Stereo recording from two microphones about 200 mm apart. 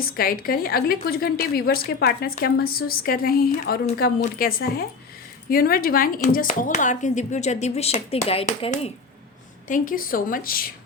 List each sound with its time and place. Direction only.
0.0 s a woman's voice: 45° left (ahead or behind)